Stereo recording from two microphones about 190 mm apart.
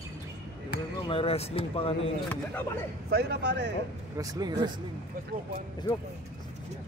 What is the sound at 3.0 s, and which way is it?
Speech, 60° right (ahead or behind).